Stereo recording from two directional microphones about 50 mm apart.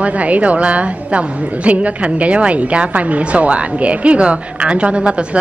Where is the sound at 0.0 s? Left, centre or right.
Right.